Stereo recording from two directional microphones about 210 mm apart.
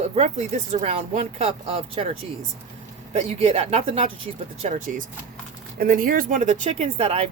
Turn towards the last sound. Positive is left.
turn(degrees=-30)  # may be behind; listen again after turning